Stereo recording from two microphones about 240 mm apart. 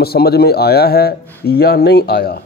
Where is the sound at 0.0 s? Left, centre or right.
Left.